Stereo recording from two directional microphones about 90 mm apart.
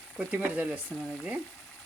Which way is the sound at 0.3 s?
15° right (ahead or behind).